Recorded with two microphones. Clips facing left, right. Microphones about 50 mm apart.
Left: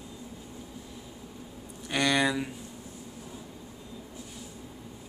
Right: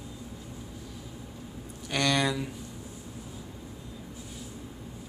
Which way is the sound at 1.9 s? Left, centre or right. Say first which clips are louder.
Left 1 dB; centre.